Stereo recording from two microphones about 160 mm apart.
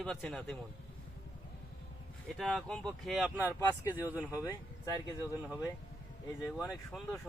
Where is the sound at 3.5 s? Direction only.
15° left (ahead or behind).